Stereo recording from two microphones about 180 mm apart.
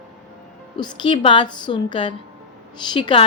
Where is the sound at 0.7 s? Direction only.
25° left (ahead or behind).